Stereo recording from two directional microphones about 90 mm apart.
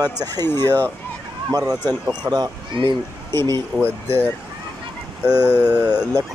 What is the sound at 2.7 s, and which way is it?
Speech, 60° right (ahead or behind).